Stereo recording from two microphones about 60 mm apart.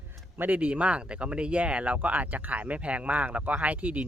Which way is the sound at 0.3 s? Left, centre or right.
Right.